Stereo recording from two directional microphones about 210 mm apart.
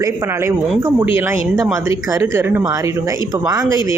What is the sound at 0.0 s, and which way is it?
Speech, 10° right (ahead or behind).